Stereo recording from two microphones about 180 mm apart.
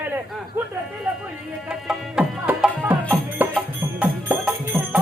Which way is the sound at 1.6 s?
Centre (ahead or behind).